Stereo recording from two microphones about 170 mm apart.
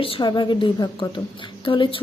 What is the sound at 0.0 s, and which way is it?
A woman's voice, 30° left (ahead or behind).